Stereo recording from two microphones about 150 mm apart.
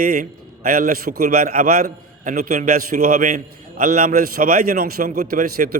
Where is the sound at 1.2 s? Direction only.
70° right (ahead or behind).